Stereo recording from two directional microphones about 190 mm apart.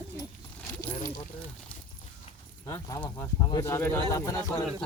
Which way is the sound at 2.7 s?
15° left (ahead or behind).